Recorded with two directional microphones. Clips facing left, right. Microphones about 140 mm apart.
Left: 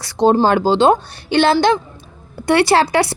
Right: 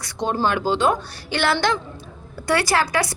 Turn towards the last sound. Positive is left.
turn(degrees=30)  # may be behind; listen again after turning